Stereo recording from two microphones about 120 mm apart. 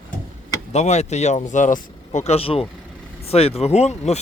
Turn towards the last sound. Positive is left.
turn(degrees=65)  # may be behind; listen again after turning